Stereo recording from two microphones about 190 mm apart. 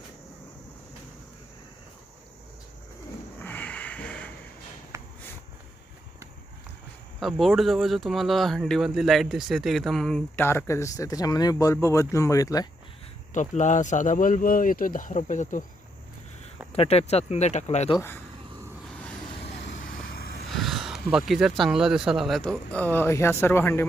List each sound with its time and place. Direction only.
3.4 s a sound: 10° left (ahead or behind)
4.9 s a sound: 15° right (ahead or behind)
7.2 s speech: centre (ahead or behind); by 12.6 s 20° left (ahead or behind)
13.3 s speech: 40° left (ahead or behind)
16.7 s speech: 30° left (ahead or behind)
17.9 s speech: 10° left (ahead or behind)
19.7 s vehicle: 45° left (ahead or behind)
20.5 s a sound: centre (ahead or behind)
21.1 s speech: 5° right (ahead or behind)